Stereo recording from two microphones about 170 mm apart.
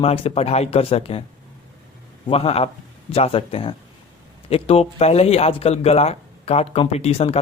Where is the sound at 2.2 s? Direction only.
35° left (ahead or behind).